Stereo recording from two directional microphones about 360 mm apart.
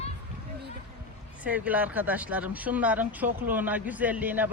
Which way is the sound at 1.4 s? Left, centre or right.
Centre.